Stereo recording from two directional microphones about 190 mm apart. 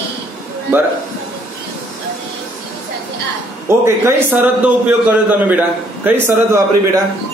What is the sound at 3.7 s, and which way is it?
Speech, 15° right (ahead or behind).